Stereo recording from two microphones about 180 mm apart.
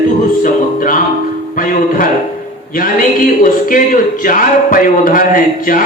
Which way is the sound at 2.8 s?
50° left (ahead or behind).